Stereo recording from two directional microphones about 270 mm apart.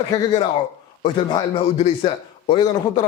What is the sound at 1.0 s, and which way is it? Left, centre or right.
A man's voice, centre.